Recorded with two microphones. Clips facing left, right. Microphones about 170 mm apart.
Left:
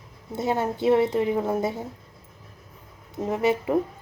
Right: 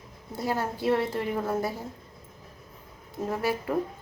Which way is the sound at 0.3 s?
20° left (ahead or behind).